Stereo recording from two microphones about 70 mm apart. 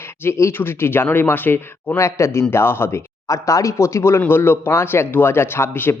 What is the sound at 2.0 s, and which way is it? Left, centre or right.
Speech, left.